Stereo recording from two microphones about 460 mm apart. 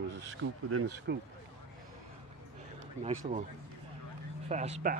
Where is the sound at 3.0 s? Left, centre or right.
Centre.